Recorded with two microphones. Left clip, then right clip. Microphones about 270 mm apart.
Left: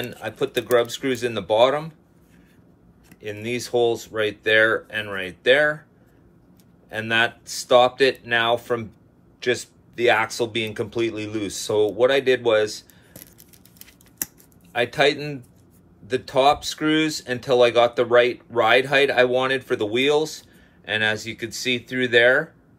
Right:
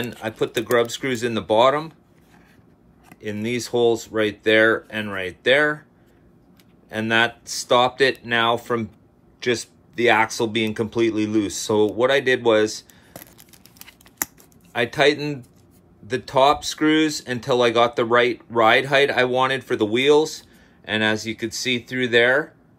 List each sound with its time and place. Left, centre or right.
0.2 s speech: right
3.2 s speech: right
6.9 s speech: right
14.7 s speech: right